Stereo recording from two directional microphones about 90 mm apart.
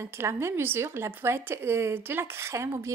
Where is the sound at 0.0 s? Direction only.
30° right (ahead or behind).